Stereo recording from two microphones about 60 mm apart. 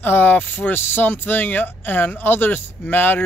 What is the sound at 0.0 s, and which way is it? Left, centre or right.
Speech, left.